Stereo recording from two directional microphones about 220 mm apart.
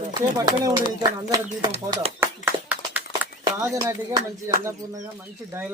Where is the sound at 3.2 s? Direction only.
10° right (ahead or behind).